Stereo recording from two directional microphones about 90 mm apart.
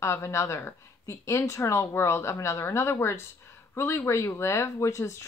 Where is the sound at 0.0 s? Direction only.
30° left (ahead or behind).